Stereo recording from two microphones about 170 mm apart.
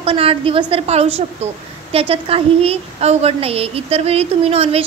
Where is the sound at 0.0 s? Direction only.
35° right (ahead or behind).